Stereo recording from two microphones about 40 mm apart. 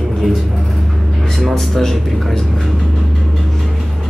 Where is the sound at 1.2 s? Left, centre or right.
Centre.